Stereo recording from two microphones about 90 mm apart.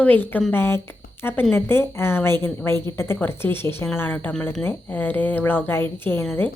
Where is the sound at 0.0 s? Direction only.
20° left (ahead or behind).